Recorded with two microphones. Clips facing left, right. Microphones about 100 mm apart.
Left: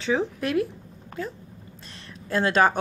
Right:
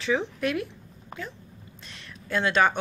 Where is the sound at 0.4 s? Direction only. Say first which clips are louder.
Left 3 dB; 35° left (ahead or behind).